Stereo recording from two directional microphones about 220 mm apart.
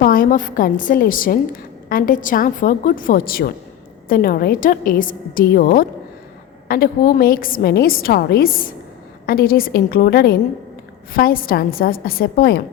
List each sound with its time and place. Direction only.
0.0 s a woman's voice: 40° left (ahead or behind)